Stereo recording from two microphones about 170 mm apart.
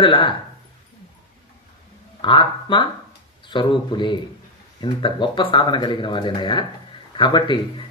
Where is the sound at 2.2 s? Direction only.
30° left (ahead or behind).